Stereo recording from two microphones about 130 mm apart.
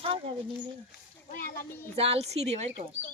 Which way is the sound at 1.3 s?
90° left.